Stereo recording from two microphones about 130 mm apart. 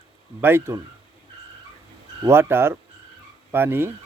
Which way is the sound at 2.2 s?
20° right (ahead or behind).